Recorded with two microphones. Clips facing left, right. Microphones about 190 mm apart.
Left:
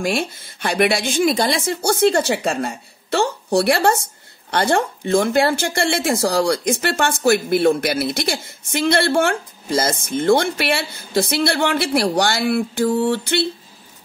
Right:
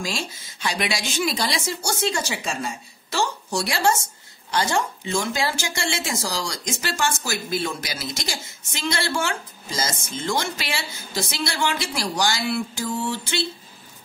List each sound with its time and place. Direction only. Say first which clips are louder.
0.0 s a woman's voice: left 8 dB; 60° left (ahead or behind)